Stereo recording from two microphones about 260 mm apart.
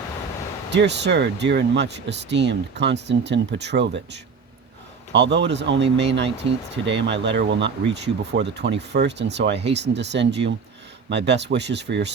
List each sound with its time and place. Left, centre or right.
0.7 s speech: right
5.1 s speech: right